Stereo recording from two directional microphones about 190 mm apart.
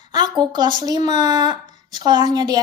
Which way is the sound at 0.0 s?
20° right (ahead or behind).